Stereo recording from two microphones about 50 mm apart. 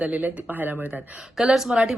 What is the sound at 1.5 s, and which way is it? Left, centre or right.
Speech, centre.